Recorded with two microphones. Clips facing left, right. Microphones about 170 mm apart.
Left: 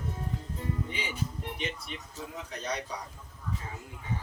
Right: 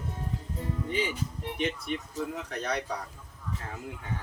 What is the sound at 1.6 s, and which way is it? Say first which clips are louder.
Speech: right 10 dB; 55° right (ahead or behind).